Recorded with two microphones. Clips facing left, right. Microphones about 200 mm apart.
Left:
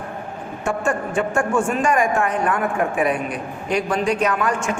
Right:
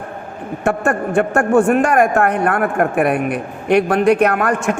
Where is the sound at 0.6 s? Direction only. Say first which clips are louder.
Right 5 dB; 60° right (ahead or behind).